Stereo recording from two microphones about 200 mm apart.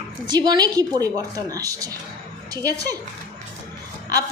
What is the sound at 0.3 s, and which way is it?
A woman's voice, 20° right (ahead or behind).